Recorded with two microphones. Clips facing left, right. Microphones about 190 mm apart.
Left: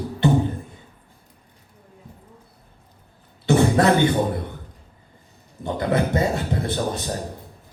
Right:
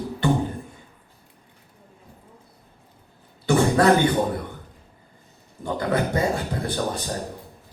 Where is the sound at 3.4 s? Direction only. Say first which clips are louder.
Left 1 dB; 25° left (ahead or behind).